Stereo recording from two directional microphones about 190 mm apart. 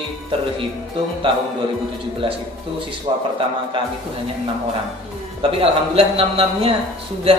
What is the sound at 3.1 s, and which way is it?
Speech, 25° right (ahead or behind).